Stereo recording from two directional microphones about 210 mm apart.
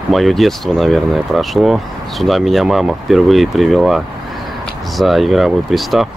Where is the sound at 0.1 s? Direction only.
Centre (ahead or behind).